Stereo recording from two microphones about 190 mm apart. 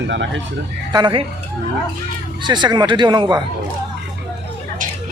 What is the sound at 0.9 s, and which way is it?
Speech, 25° right (ahead or behind).